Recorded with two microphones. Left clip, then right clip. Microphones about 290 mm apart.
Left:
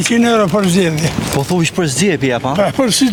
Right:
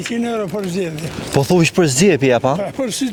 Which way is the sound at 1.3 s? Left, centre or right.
Right.